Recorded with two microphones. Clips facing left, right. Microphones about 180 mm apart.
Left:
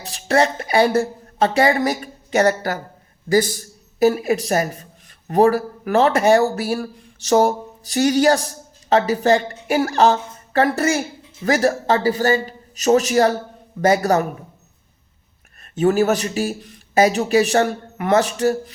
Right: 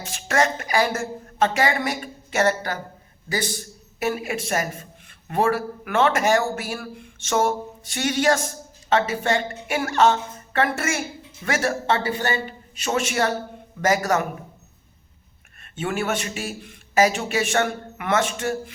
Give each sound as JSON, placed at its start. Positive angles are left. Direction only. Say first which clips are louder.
{"t": 0.0, "sound": "speech", "louder": "left 4 dB", "side_deg": 35}
{"t": 4.0, "sound": "speech", "louder": "left 9 dB", "side_deg": 35}
{"t": 15.6, "sound": "speech", "louder": "left 10 dB", "side_deg": 40}